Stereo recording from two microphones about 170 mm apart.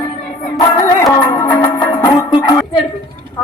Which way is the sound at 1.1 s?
25° left (ahead or behind).